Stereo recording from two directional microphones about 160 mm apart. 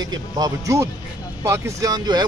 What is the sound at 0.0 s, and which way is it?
Speech, 25° right (ahead or behind).